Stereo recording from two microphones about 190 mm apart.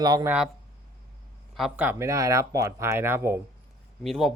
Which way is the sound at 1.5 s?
5° right (ahead or behind).